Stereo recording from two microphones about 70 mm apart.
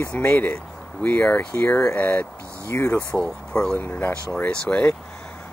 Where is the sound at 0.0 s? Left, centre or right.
Left.